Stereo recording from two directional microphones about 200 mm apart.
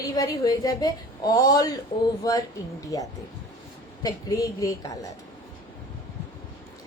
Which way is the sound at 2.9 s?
20° left (ahead or behind).